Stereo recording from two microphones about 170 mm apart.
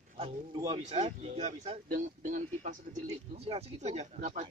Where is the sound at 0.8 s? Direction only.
40° right (ahead or behind).